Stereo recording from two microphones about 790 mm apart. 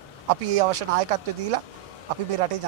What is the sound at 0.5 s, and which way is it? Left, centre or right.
A man's voice, right.